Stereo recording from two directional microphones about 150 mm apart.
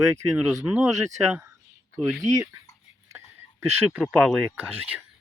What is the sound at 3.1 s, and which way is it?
Speech, 15° right (ahead or behind).